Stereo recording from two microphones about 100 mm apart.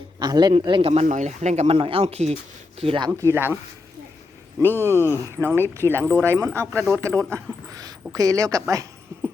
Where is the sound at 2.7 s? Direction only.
75° right (ahead or behind).